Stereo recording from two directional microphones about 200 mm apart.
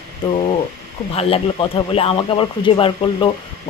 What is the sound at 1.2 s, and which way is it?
Speech, 30° left (ahead or behind).